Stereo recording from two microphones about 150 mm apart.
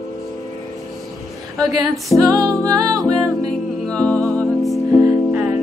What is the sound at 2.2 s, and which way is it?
Music, 20° right (ahead or behind).